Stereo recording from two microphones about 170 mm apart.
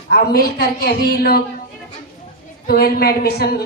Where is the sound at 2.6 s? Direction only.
65° left (ahead or behind).